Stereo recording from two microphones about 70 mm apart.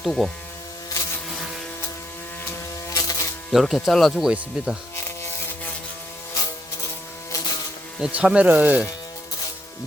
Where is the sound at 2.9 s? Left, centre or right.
Left.